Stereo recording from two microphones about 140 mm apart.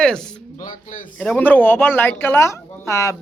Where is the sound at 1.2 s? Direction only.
10° left (ahead or behind).